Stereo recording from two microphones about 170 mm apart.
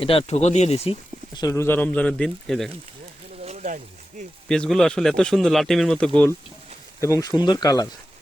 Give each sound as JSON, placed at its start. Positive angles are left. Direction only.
{"t": 0.0, "sound": "speech", "side_deg": 35}
{"t": 1.3, "sound": "speech", "side_deg": 20}
{"t": 3.4, "sound": "a sound", "side_deg": -45}
{"t": 4.4, "sound": "a man's voice", "side_deg": 5}
{"t": 7.0, "sound": "speech", "side_deg": 20}